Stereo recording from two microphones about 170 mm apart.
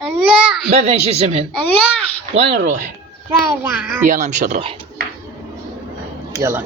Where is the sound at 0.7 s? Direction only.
40° right (ahead or behind).